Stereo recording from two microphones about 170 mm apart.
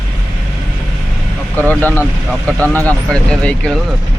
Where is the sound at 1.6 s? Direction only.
10° left (ahead or behind).